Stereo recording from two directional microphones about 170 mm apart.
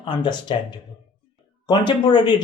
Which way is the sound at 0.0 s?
25° left (ahead or behind).